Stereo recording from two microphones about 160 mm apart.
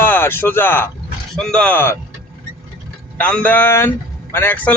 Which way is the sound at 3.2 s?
10° left (ahead or behind).